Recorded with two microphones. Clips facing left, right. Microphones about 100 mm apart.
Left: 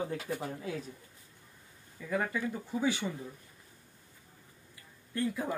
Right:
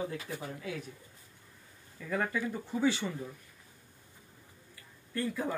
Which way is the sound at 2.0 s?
10° left (ahead or behind).